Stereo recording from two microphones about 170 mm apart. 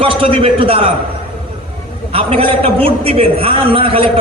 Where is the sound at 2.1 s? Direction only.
35° right (ahead or behind).